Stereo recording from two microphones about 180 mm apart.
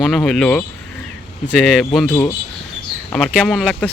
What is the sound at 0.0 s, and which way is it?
Speech, 5° left (ahead or behind).